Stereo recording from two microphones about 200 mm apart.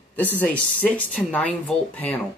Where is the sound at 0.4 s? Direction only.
10° left (ahead or behind).